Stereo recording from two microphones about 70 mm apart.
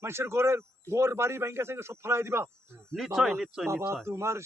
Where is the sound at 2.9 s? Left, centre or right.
Centre.